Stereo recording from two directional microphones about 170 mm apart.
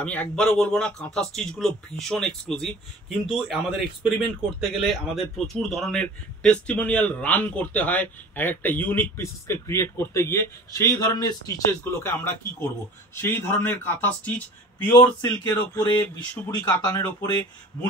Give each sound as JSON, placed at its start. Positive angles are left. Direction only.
{"t": 0.0, "sound": "a man's voice", "side_deg": 10}